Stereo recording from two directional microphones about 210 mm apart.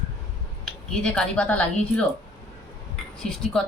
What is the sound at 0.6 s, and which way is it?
Speech, 5° left (ahead or behind).